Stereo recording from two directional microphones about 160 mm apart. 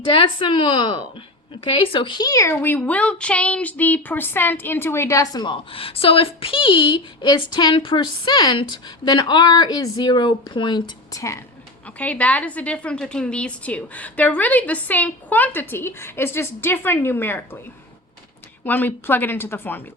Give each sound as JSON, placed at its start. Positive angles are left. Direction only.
{"t": 0.2, "sound": "a woman's voice", "side_deg": 30}
{"t": 11.9, "sound": "a woman's voice", "side_deg": 10}
{"t": 18.6, "sound": "a woman's voice", "side_deg": 10}